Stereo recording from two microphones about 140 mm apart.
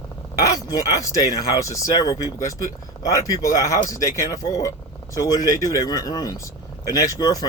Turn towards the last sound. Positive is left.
turn(degrees=25)  # may be behind; listen again after turning